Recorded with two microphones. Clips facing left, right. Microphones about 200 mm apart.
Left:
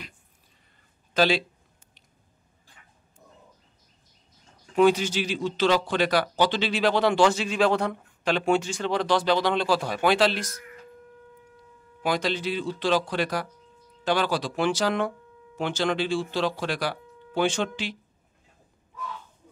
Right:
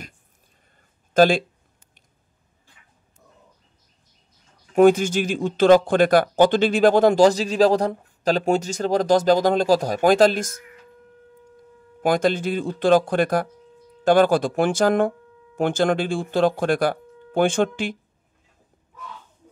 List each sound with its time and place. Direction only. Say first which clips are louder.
1.1 s speech: right 7 dB; 50° right (ahead or behind)
4.7 s speech: right 5 dB; 50° right (ahead or behind)
12.0 s speech: right 7 dB; 50° right (ahead or behind)